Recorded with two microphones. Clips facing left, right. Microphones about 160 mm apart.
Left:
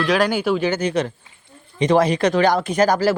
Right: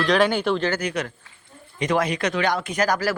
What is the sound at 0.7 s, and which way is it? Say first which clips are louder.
Speech: left 5 dB; 25° left (ahead or behind).